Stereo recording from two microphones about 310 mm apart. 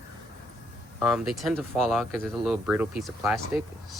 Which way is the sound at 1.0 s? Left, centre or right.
Centre.